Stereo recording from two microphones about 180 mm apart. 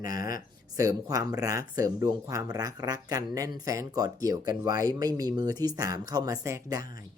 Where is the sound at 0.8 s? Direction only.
20° right (ahead or behind).